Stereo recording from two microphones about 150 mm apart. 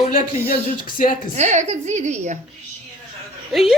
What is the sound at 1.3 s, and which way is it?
A woman's voice, 50° right (ahead or behind).